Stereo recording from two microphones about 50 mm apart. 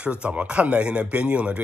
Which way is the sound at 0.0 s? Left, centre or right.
Right.